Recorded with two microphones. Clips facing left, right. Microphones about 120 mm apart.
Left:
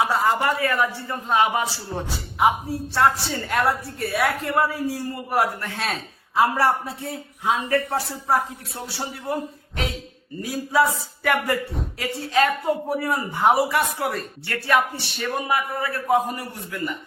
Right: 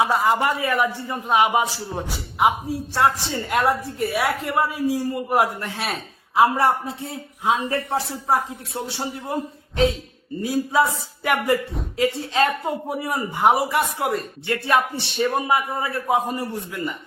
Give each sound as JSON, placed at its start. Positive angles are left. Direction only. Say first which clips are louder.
{"t": 0.3, "sound": "a man's voice", "louder": "right 1 dB", "side_deg": -15}